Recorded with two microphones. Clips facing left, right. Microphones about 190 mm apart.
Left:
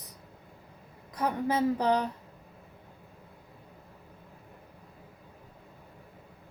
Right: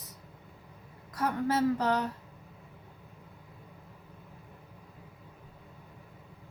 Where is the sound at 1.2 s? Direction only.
15° left (ahead or behind).